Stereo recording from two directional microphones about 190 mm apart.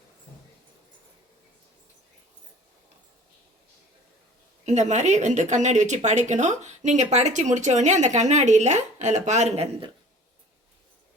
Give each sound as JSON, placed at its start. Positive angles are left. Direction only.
{"t": 4.6, "sound": "speech", "side_deg": -35}